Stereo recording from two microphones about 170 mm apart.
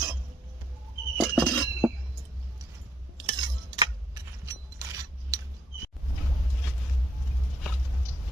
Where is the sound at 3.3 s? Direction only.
25° right (ahead or behind).